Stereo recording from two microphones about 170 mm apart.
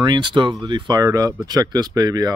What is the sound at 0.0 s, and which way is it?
Speech, 25° right (ahead or behind).